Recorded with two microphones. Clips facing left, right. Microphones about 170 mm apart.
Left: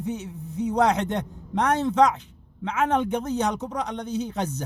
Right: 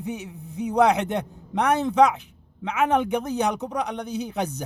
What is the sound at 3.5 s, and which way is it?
Speech, 60° right (ahead or behind).